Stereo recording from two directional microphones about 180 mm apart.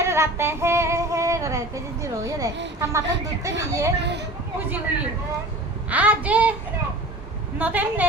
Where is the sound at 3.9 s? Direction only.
70° right (ahead or behind).